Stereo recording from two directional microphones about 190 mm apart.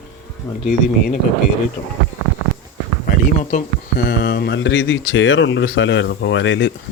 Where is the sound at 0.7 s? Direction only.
50° left (ahead or behind).